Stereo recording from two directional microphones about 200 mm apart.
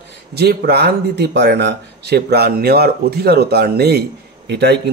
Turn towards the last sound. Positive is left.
turn(degrees=-55)  # may be behind; listen again after turning